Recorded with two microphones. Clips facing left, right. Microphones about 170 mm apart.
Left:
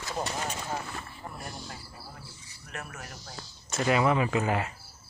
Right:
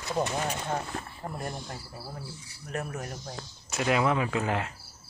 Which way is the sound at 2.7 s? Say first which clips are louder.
Right 7 dB; 35° right (ahead or behind).